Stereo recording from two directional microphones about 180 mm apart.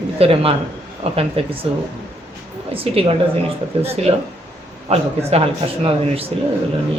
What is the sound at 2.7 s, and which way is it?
A woman's voice, 30° right (ahead or behind).